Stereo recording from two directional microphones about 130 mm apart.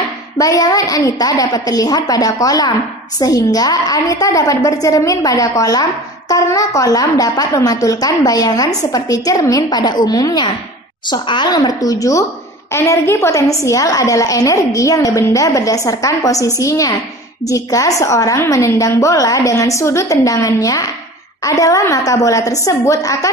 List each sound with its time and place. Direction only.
0.4 s a woman's voice: 25° left (ahead or behind)